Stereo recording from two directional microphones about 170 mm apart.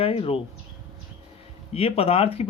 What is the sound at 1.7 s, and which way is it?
Speech, 35° left (ahead or behind).